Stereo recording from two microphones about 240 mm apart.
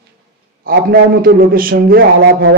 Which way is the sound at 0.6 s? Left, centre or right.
Right.